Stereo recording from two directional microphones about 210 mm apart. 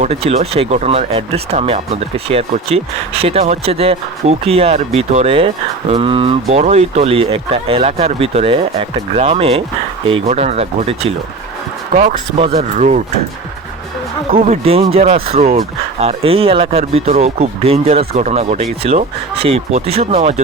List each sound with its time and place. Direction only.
0.0 s speech: 30° right (ahead or behind)
14.3 s speech: 30° right (ahead or behind)